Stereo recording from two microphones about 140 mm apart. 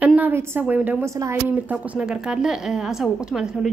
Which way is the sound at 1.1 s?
20° right (ahead or behind).